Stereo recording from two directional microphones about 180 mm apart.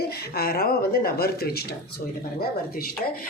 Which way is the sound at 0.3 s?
60° left (ahead or behind).